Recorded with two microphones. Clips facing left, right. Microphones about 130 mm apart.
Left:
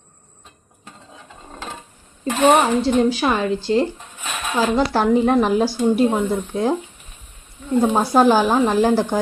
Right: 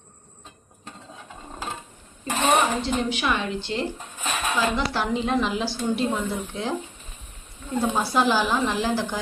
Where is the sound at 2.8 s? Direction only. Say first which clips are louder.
Left 8 dB; 35° left (ahead or behind).